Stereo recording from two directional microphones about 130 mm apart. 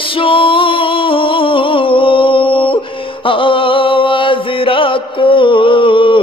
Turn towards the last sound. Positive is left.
turn(degrees=40)  # may be behind; listen again after turning